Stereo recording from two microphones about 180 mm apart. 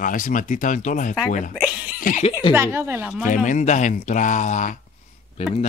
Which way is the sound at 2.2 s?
30° left (ahead or behind).